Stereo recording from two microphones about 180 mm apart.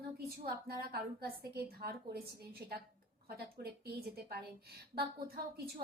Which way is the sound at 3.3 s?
60° right (ahead or behind).